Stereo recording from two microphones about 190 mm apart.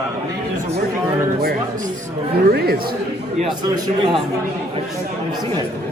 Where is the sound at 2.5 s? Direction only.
55° right (ahead or behind).